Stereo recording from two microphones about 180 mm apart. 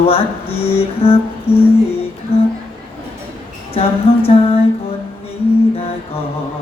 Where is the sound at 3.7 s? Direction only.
30° left (ahead or behind).